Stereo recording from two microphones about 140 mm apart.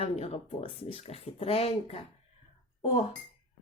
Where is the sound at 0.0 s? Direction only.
45° left (ahead or behind).